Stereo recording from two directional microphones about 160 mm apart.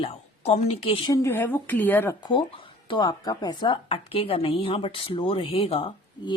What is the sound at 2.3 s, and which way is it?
A woman's voice, 30° left (ahead or behind).